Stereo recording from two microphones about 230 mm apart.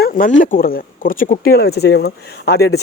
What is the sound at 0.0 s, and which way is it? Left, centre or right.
Speech, left.